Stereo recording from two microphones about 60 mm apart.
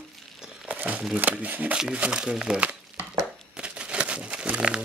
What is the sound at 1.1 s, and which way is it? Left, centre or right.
Speech, right.